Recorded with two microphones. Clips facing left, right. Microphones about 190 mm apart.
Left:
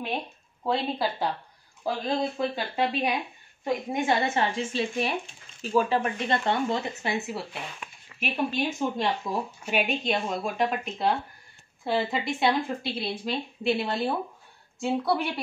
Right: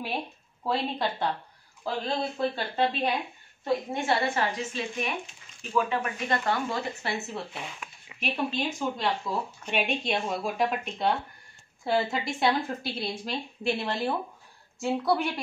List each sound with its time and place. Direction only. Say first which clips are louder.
0.7 s speech: left 2 dB; centre (ahead or behind); by 7.2 s 20° left (ahead or behind)
7.2 s speech: left 2 dB; 5° left (ahead or behind)
8.1 s a sound: left 4 dB; 15° right (ahead or behind)
8.7 s speech: left 2 dB; 20° left (ahead or behind)
9.6 s speech: left 2 dB; 5° left (ahead or behind)